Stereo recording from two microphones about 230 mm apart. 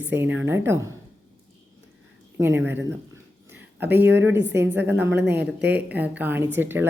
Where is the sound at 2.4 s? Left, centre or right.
Centre.